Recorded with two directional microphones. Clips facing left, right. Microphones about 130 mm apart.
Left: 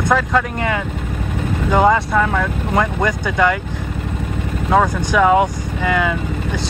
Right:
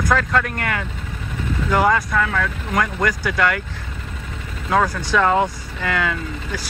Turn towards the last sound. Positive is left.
turn(degrees=20)  # may be behind; listen again after turning